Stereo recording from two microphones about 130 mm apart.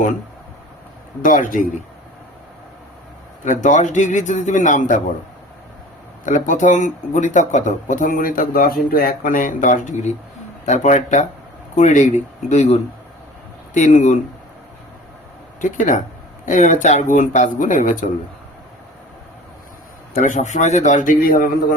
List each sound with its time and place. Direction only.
1.2 s speech: 90° left
3.4 s speech: 75° left (ahead or behind)
6.2 s speech: 75° left (ahead or behind)
15.6 s speech: 90° left
16.5 s speech: 70° left (ahead or behind)
20.1 s speech: 75° left (ahead or behind); by 21.8 s 90° left